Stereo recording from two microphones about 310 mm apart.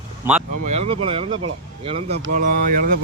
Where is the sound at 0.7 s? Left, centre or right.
Right.